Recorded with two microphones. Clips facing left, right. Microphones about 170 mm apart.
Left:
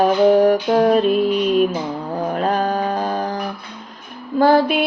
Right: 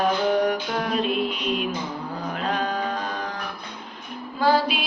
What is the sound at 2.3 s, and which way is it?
Music, 45° left (ahead or behind).